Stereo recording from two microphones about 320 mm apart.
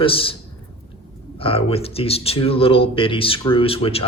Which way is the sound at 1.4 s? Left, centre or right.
Centre.